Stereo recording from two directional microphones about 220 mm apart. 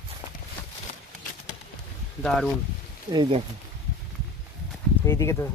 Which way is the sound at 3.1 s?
20° right (ahead or behind).